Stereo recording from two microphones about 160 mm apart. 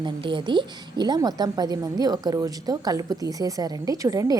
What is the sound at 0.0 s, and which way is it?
A woman's voice, 30° right (ahead or behind).